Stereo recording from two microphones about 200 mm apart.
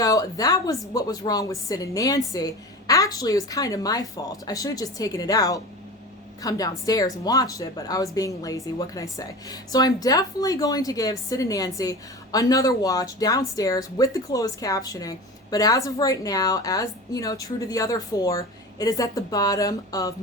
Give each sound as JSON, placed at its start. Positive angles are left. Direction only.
{"t": 0.0, "sound": "speech", "side_deg": 20}